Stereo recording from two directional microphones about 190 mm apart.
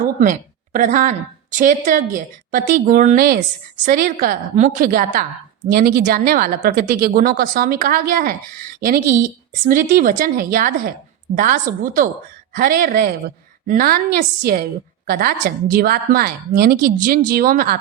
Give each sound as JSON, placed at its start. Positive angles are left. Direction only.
{"t": 0.2, "sound": "a woman's voice", "side_deg": -45}